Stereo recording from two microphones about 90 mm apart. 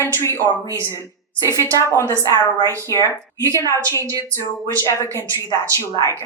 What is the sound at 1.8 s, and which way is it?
Speech, 35° left (ahead or behind).